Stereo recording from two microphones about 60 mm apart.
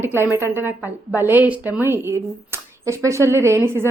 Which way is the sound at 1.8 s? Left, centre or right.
Right.